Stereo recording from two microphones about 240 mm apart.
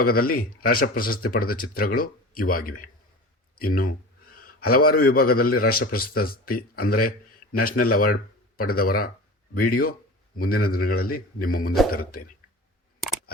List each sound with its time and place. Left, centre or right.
0.0 s a man's voice: left
3.6 s a sound: left
4.9 s a man's voice: left